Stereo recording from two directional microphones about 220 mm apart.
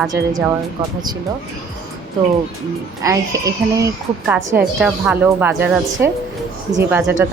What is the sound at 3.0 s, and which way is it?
A woman's voice, 15° right (ahead or behind).